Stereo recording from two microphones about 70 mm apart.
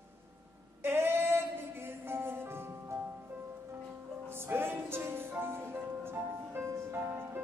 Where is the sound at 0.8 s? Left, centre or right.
Right.